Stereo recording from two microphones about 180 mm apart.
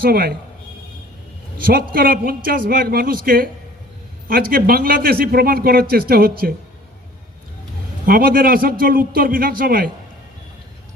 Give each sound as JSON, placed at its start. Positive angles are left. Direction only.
{"t": 0.0, "sound": "a man's voice", "side_deg": -55}
{"t": 1.6, "sound": "a man's voice", "side_deg": -55}
{"t": 8.0, "sound": "a man's voice", "side_deg": -55}